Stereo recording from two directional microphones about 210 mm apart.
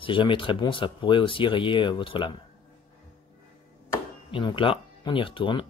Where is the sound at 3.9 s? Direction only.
20° left (ahead or behind).